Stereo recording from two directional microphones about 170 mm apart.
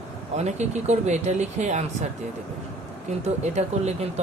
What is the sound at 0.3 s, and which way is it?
Speech, 40° right (ahead or behind).